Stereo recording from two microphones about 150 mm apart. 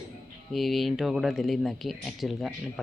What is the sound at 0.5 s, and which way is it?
Speech, centre (ahead or behind).